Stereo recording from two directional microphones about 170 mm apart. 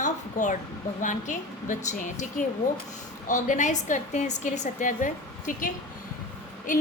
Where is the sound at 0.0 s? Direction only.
50° left (ahead or behind).